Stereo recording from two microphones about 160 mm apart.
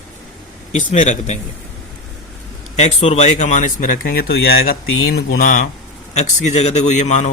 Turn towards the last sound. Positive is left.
turn(degrees=45)  # may be behind; listen again after turning